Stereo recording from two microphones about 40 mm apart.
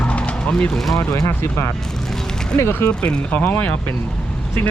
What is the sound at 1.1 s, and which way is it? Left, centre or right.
Speech, left.